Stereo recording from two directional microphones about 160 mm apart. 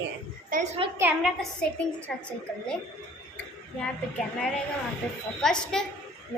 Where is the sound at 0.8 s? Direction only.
35° right (ahead or behind).